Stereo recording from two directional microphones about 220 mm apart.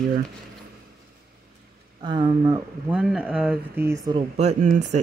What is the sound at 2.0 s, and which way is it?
Speech, 20° right (ahead or behind).